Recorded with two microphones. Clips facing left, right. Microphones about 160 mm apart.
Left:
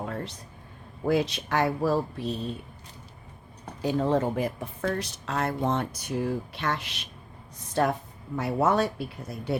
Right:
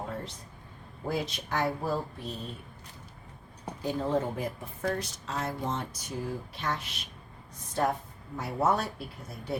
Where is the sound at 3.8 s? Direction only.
80° left.